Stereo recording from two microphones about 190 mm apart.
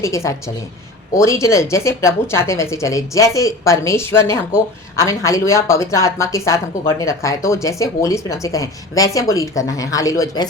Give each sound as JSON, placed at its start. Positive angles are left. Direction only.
{"t": 0.0, "sound": "a woman's voice", "side_deg": 15}